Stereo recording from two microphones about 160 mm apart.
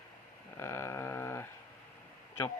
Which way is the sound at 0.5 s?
15° left (ahead or behind).